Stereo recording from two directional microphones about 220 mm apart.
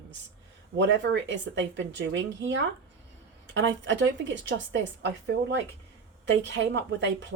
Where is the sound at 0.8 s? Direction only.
55° right (ahead or behind).